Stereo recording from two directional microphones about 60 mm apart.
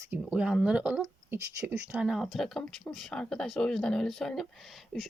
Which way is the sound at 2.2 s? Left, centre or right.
Centre.